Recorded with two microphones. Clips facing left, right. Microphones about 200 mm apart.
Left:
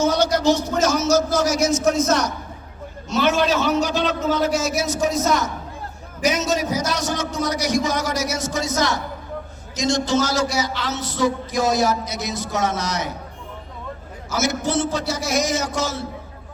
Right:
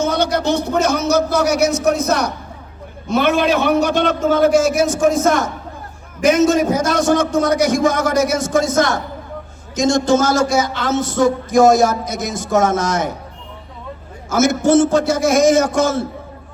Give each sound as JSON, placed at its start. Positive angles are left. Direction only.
{"t": 0.0, "sound": "a man's voice", "side_deg": -60}
{"t": 14.3, "sound": "a man's voice", "side_deg": -50}